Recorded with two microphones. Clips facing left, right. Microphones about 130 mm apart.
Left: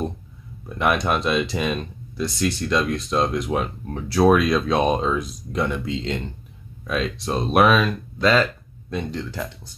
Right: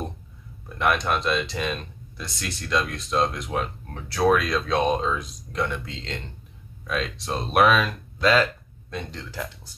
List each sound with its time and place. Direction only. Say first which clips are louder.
0.7 s speech: left 2 dB; 5° left (ahead or behind)